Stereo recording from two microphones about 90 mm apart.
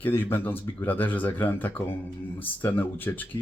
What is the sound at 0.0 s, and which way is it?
Speech, 25° left (ahead or behind).